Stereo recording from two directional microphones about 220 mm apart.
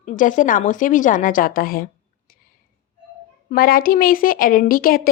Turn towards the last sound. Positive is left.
turn(degrees=40)  # may be behind; listen again after turning